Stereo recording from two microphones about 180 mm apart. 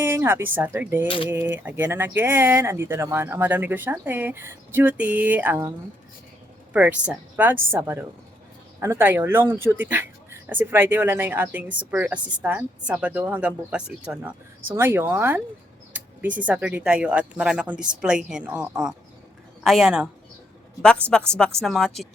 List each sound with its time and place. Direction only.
0.0 s speech: 10° right (ahead or behind)
1.0 s speech: 30° left (ahead or behind)
1.3 s speech: 10° right (ahead or behind)
6.7 s speech: 5° right (ahead or behind)
15.9 s a sound: 10° right (ahead or behind)
16.5 s speech: 10° right (ahead or behind)